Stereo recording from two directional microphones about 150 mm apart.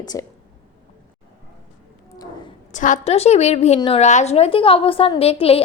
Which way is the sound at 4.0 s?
50° left (ahead or behind).